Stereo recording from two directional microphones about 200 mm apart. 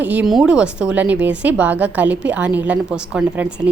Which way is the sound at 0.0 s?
5° right (ahead or behind).